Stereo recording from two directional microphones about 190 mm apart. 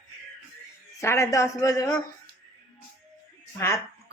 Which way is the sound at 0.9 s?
15° left (ahead or behind).